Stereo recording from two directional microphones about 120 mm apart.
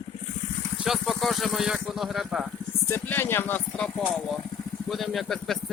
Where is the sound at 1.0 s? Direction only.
Centre (ahead or behind).